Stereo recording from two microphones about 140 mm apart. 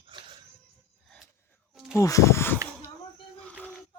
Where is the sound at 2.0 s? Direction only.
25° left (ahead or behind).